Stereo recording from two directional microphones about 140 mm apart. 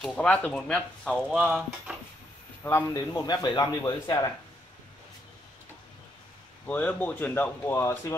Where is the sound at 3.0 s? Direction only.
30° left (ahead or behind).